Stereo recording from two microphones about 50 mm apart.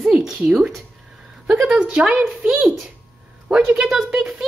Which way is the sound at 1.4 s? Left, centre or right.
Centre.